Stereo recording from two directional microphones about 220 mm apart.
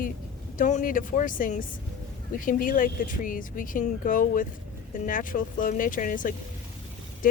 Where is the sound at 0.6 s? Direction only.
35° left (ahead or behind).